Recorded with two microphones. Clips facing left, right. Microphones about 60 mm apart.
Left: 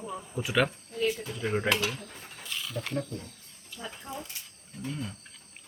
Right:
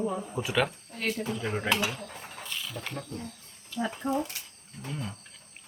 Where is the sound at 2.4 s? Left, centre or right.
Centre.